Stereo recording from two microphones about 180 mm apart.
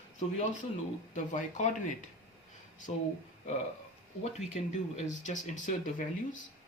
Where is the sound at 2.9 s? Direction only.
35° left (ahead or behind).